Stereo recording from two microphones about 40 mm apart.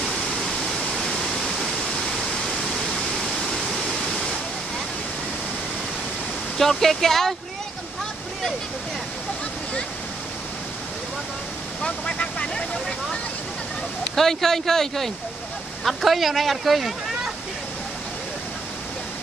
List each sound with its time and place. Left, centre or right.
0.3 s waterfall: centre
6.6 s speech: centre
11.8 s speech: left
14.1 s speech: centre